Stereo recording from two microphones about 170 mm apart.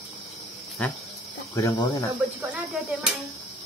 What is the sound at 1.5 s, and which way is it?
Speech, 20° left (ahead or behind).